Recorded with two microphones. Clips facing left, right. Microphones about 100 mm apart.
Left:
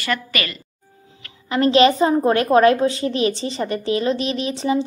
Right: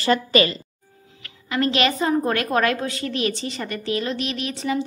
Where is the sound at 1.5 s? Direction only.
30° left (ahead or behind).